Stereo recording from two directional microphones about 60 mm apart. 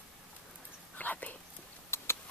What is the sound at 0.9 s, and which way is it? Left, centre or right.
Whispering, left.